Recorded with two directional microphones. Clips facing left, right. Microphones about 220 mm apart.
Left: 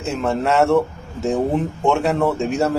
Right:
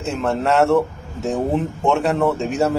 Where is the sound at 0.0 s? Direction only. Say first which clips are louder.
Even; centre (ahead or behind).